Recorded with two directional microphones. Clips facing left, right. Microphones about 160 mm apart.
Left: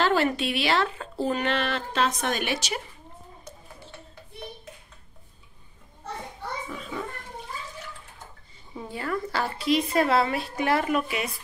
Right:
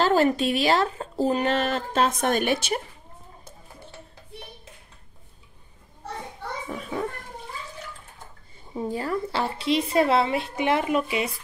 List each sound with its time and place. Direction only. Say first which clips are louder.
0.0 s speech: right 3 dB; 40° right (ahead or behind)
6.7 s children playing: right 5 dB; 50° right (ahead or behind)
8.7 s a woman's voice: right 4 dB; 35° right (ahead or behind)